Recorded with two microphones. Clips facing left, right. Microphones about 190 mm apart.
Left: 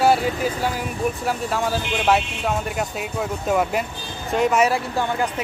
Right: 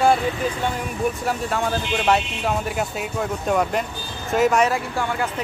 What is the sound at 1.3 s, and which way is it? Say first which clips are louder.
Speech: even; centre (ahead or behind).